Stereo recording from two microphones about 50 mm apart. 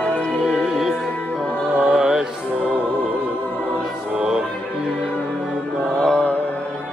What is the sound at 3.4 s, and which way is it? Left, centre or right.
Music, left.